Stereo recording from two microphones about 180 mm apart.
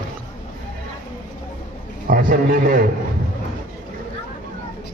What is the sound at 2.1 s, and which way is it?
Speech, 50° right (ahead or behind).